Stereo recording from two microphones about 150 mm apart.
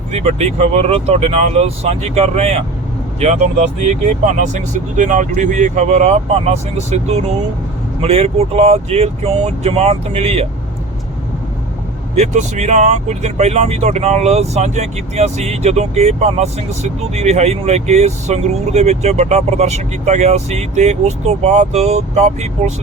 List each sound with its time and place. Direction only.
0.1 s speech: 45° right (ahead or behind)
12.1 s speech: 50° right (ahead or behind)